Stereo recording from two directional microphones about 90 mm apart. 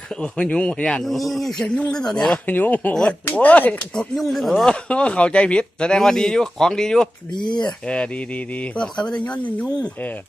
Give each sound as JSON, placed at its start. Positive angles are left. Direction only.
{"t": 0.1, "sound": "speech", "side_deg": 10}
{"t": 1.0, "sound": "speech", "side_deg": 0}
{"t": 2.5, "sound": "speech", "side_deg": 20}
{"t": 2.9, "sound": "speech", "side_deg": 10}
{"t": 4.1, "sound": "speech", "side_deg": 0}
{"t": 7.3, "sound": "speech", "side_deg": 60}
{"t": 7.6, "sound": "speech", "side_deg": 10}